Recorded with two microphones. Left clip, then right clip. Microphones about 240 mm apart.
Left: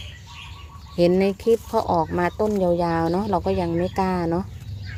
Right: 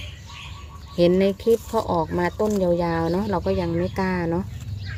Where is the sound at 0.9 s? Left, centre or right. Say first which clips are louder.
Even; centre.